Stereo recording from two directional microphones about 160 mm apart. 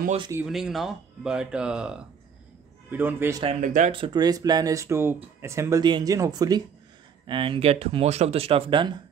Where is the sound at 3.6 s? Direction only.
50° right (ahead or behind).